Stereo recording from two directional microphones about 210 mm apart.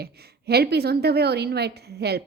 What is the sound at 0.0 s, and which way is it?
A woman's voice, 50° right (ahead or behind).